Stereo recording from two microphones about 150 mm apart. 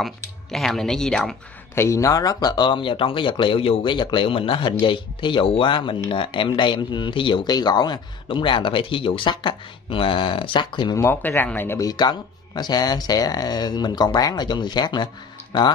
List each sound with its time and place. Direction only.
0.0 s speech: centre (ahead or behind)
1.8 s speech: 20° left (ahead or behind)
11.0 s speech: 15° left (ahead or behind)